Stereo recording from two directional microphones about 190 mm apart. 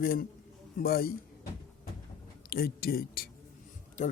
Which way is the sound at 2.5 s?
55° left (ahead or behind).